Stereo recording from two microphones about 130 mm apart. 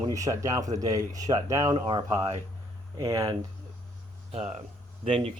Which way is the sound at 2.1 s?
20° right (ahead or behind).